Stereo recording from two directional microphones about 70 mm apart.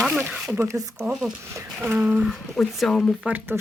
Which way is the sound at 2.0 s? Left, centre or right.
Centre.